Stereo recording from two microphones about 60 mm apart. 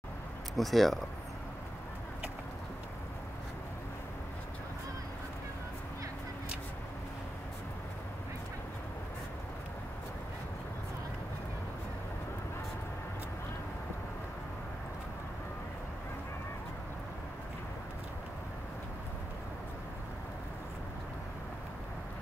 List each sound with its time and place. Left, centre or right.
0.6 s speech: centre